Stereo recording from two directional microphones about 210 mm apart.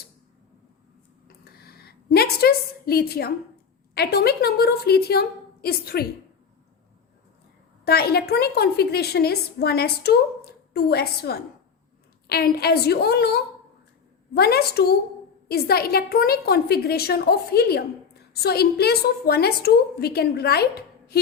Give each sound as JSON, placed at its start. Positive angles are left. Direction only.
{"t": 1.5, "sound": "a sound", "side_deg": 45}
{"t": 3.9, "sound": "a woman's voice", "side_deg": 50}
{"t": 7.9, "sound": "a woman's voice", "side_deg": 50}